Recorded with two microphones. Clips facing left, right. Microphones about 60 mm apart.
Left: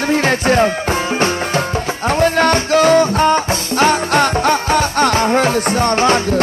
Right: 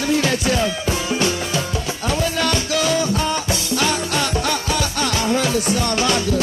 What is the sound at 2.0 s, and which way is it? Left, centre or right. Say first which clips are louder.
Music: left 8 dB; left.